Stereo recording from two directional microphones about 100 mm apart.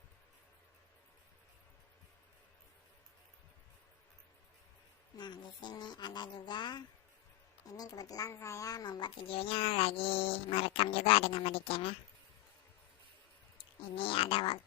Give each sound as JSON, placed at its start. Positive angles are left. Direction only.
{"t": 5.1, "sound": "speech", "side_deg": 45}
{"t": 7.6, "sound": "a child's voice", "side_deg": 35}
{"t": 13.9, "sound": "a child's voice", "side_deg": 65}